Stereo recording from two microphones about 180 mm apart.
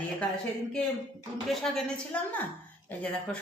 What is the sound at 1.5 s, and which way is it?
A man's voice, centre (ahead or behind).